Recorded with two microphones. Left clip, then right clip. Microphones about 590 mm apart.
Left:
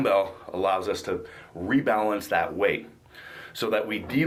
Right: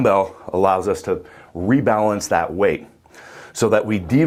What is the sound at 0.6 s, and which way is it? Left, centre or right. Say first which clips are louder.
Speech: right 8 dB; right.